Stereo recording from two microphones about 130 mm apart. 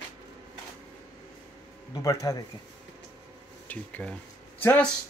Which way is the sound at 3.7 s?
10° left (ahead or behind).